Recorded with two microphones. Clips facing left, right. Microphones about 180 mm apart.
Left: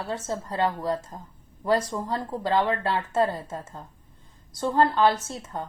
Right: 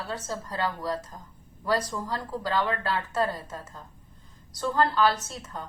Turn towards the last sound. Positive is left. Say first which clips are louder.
# left 4 dB
turn(degrees=25)  # may be behind; listen again after turning